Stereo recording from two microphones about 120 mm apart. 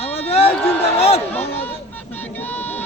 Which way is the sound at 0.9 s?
60° left (ahead or behind).